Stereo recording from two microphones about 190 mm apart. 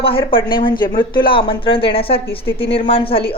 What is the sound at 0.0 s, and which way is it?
A woman's voice, 30° left (ahead or behind).